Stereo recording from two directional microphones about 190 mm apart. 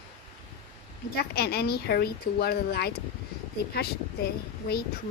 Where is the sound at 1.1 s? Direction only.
55° left (ahead or behind).